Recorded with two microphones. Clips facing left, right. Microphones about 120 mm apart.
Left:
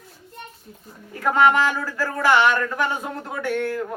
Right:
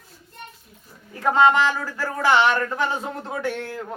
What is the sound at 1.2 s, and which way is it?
Speech, 25° right (ahead or behind).